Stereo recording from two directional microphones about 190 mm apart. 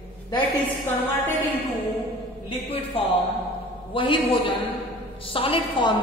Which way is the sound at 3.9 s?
25° left (ahead or behind).